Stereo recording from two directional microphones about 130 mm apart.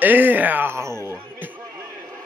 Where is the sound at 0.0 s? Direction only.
15° right (ahead or behind).